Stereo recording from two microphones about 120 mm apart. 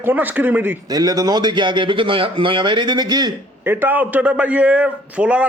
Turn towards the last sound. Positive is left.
turn(degrees=-10)  # may be behind; listen again after turning